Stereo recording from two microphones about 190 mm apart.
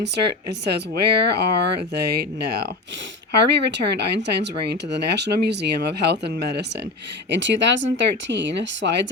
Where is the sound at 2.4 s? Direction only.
60° right (ahead or behind).